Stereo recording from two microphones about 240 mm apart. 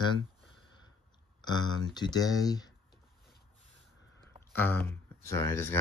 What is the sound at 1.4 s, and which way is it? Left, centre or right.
Speech, centre.